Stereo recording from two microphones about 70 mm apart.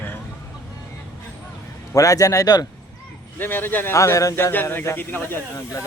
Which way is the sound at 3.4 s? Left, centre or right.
Left.